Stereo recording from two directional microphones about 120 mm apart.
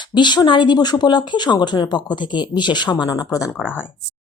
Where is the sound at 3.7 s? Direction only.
15° left (ahead or behind).